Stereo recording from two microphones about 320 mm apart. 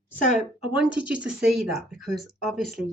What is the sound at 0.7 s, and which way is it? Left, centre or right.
Speech, centre.